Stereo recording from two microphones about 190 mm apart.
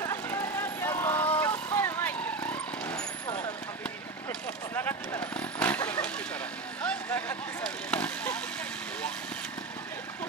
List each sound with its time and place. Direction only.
0.0 s vehicle: 15° left (ahead or behind)
4.3 s vehicle: 10° left (ahead or behind)